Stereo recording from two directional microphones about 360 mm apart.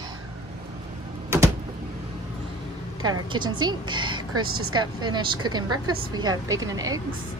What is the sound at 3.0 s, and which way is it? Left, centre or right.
A woman's voice, centre.